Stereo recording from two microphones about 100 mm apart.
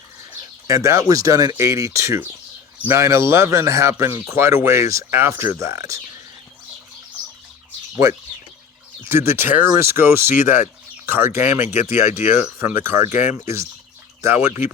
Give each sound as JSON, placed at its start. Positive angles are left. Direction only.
{"t": 0.7, "sound": "speech", "side_deg": -35}
{"t": 9.0, "sound": "speech", "side_deg": -25}